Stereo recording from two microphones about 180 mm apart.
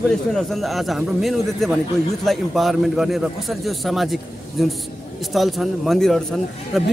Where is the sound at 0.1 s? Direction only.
Centre (ahead or behind).